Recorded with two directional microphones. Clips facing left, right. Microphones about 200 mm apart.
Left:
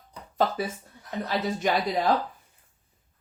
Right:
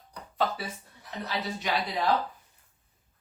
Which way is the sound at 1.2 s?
45° left (ahead or behind).